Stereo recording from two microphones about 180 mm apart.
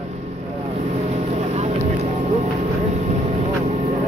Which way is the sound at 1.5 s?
35° right (ahead or behind).